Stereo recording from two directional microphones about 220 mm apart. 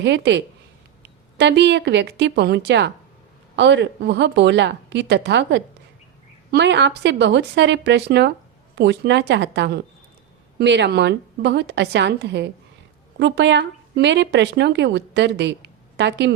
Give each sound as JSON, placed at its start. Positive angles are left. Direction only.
{"t": 0.0, "sound": "a woman's voice", "side_deg": -55}